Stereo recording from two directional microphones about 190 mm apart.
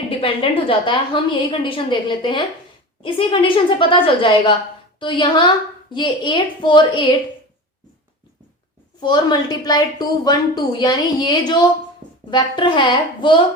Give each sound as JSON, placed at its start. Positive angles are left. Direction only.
{"t": 0.2, "sound": "a woman's voice", "side_deg": 30}
{"t": 9.0, "sound": "a woman's voice", "side_deg": 25}